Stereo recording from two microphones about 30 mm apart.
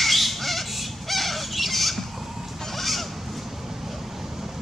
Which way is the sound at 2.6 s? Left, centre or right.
Centre.